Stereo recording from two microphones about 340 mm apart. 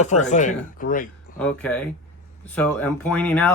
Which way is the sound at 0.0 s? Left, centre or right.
Left.